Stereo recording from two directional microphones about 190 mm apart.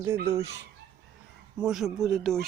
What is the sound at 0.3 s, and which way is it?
Speech, 15° right (ahead or behind).